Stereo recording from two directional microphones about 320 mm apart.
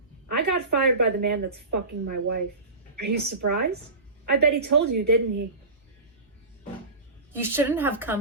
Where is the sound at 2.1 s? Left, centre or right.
Right.